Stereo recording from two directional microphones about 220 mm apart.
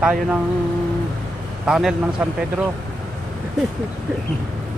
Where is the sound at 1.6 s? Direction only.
Centre (ahead or behind).